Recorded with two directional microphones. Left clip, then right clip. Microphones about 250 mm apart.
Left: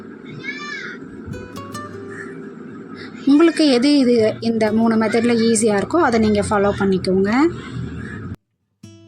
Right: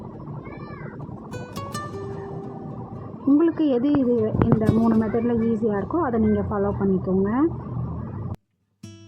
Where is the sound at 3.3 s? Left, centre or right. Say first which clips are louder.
Left 6 dB; centre.